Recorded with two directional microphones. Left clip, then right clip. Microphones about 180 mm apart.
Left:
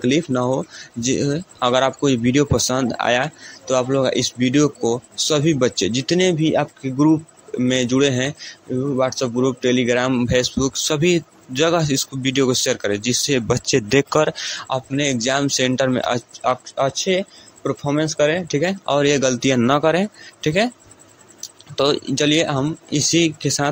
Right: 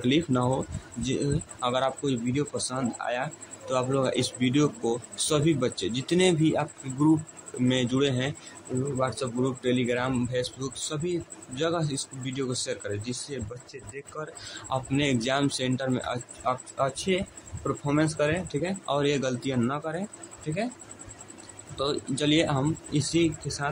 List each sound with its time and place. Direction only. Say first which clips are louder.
0.0 s speech: left 7 dB; 25° left (ahead or behind); by 13.7 s 40° left (ahead or behind)
14.7 s speech: left 5 dB; 25° left (ahead or behind); by 20.7 s 40° left (ahead or behind)
21.7 s speech: left 11 dB; 35° left (ahead or behind)